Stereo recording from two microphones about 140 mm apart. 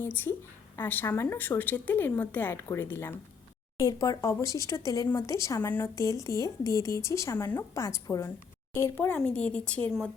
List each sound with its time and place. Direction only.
0.0 s a woman's voice: 15° left (ahead or behind)